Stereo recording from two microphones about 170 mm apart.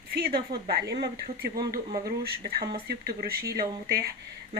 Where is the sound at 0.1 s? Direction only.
65° right (ahead or behind).